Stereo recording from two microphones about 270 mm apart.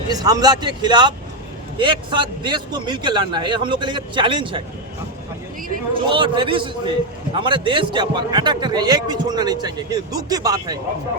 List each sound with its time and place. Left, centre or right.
0.1 s a man's voice: centre
5.9 s a man's voice: centre